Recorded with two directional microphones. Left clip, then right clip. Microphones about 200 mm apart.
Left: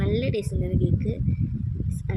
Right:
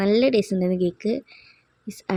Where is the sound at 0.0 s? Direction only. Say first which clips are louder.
Right 8 dB; 20° right (ahead or behind).